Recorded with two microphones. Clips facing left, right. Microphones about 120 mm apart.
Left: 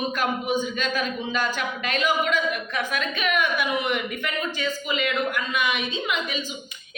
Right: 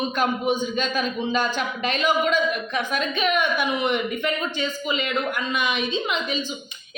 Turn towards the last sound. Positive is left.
turn(degrees=-25)  # may be behind; listen again after turning